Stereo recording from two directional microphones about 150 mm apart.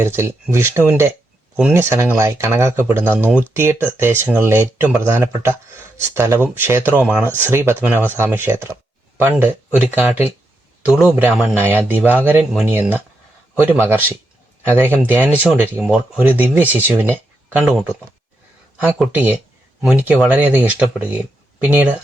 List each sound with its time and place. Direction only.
0.0 s speech: 15° right (ahead or behind)
18.8 s speech: 10° right (ahead or behind)